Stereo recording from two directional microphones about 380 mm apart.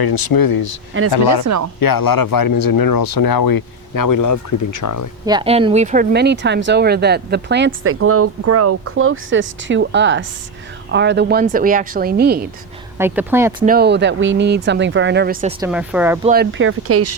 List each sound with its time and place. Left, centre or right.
0.0 s speech: left
1.5 s speech: right
1.8 s speech: left
5.2 s speech: centre
13.0 s speech: centre
13.7 s speech: right
15.6 s speech: centre
16.3 s speech: right